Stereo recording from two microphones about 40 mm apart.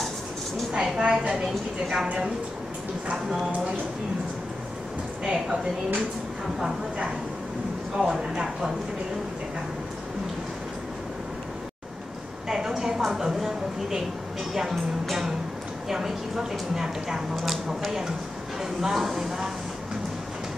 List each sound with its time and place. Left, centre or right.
0.7 s a woman's voice: centre
5.2 s a woman's voice: right
8.0 s a woman's voice: centre
12.4 s a woman's voice: centre
17.4 s a woman's voice: centre